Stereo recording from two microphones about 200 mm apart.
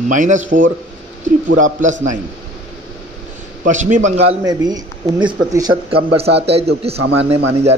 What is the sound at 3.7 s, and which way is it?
Speech, 35° right (ahead or behind).